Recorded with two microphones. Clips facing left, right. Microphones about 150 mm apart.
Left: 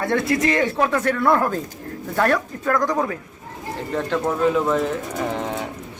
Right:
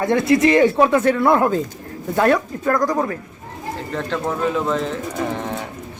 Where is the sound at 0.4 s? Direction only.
30° right (ahead or behind).